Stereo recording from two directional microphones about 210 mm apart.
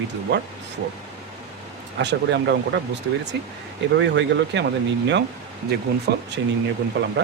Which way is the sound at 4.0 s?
60° right (ahead or behind).